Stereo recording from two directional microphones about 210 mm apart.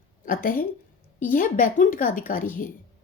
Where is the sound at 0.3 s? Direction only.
40° left (ahead or behind).